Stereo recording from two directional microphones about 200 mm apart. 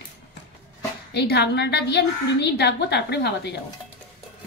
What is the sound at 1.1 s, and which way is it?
A woman's voice, 55° left (ahead or behind).